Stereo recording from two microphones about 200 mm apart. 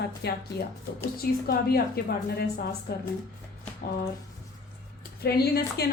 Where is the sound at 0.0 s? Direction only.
55° left (ahead or behind).